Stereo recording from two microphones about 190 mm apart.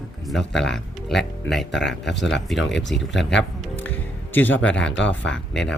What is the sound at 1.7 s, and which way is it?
Speech, 65° left (ahead or behind).